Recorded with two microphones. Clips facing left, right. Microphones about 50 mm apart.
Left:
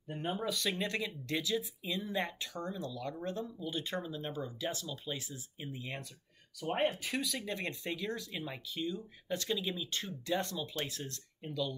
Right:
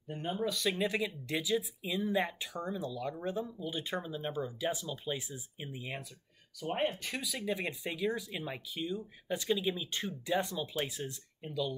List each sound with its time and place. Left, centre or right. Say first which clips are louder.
0.1 s speech: right 1 dB; centre
6.8 s speech: left 2 dB; centre